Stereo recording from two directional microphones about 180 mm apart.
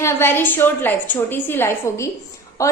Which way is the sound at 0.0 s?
15° left (ahead or behind).